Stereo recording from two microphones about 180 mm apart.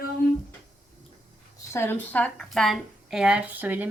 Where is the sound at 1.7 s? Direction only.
15° left (ahead or behind); by 3.9 s 10° right (ahead or behind).